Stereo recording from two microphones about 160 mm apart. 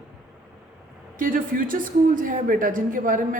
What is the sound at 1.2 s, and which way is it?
A man's voice, 60° right (ahead or behind).